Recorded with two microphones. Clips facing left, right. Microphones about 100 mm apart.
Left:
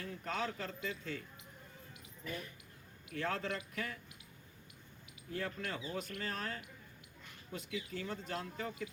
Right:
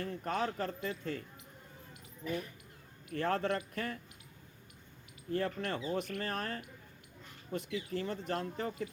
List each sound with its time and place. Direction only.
0.0 s speech: 50° right (ahead or behind)
3.1 s speech: 55° right (ahead or behind)
5.3 s speech: 50° right (ahead or behind)